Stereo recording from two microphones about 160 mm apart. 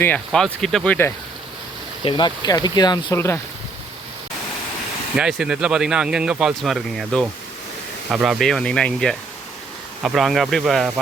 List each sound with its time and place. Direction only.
0.3 s speech: centre (ahead or behind)
2.0 s speech: 30° left (ahead or behind)
3.2 s speech: 15° left (ahead or behind)
5.1 s speech: 5° right (ahead or behind)